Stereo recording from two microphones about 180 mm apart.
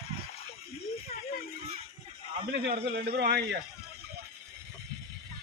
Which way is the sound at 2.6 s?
60° right (ahead or behind).